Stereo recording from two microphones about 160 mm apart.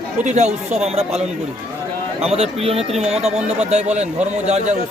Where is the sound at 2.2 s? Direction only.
40° right (ahead or behind).